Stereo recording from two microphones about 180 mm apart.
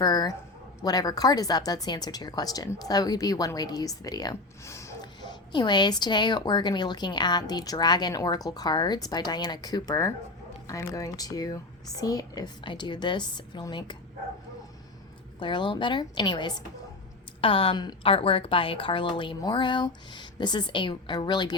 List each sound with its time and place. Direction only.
0.0 s speech: 20° left (ahead or behind)
15.4 s speech: 25° left (ahead or behind)